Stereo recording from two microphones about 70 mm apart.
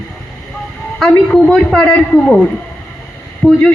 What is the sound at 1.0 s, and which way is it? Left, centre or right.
Speech, centre.